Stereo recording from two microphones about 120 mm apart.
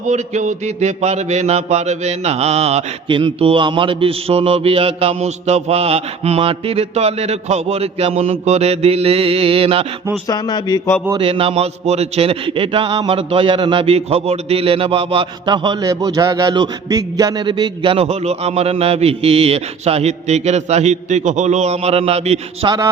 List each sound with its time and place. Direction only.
0.1 s a man's voice: 80° right; by 2.8 s 60° right (ahead or behind)
3.1 s a man's voice: 45° right (ahead or behind)
10.2 s speech: 35° left (ahead or behind)
11.2 s a man's voice: 50° right (ahead or behind)
22.6 s music: 40° right (ahead or behind)